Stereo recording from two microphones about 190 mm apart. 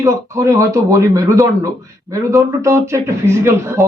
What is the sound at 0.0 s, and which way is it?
Speech, 15° right (ahead or behind).